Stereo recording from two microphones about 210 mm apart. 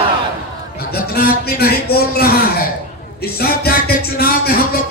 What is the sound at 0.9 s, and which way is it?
A man's voice, 45° left (ahead or behind).